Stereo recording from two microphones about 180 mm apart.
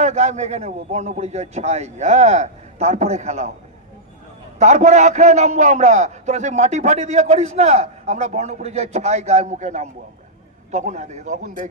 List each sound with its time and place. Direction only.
0.0 s a man's voice: 40° right (ahead or behind)
4.6 s a man's voice: 40° right (ahead or behind)